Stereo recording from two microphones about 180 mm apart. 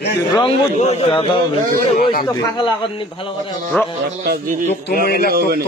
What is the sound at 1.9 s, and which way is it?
Speech, 50° left (ahead or behind).